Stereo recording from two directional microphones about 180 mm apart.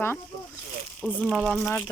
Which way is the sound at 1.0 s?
Centre (ahead or behind).